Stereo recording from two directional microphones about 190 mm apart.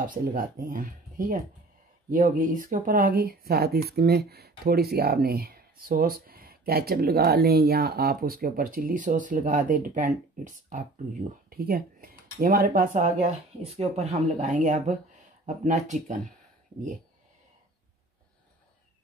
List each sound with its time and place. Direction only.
0.0 s speech: 50° right (ahead or behind)